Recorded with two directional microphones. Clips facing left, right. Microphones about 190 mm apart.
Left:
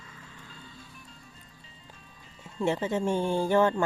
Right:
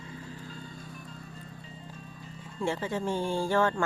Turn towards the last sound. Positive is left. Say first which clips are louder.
# left 3 dB
turn(degrees=20)  # may be behind; listen again after turning